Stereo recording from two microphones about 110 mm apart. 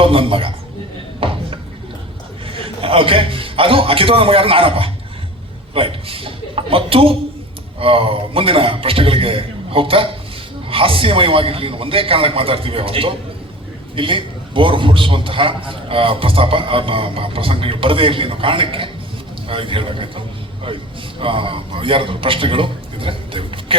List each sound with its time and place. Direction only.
0.0 s speech: 55° right (ahead or behind)
1.2 s a sound: 55° right (ahead or behind)
2.5 s a man's voice: 55° right (ahead or behind)